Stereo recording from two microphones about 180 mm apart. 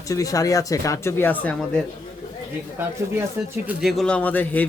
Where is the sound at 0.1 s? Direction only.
20° left (ahead or behind).